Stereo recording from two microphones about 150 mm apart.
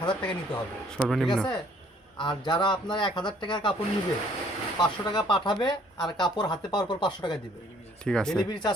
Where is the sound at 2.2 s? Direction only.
30° left (ahead or behind).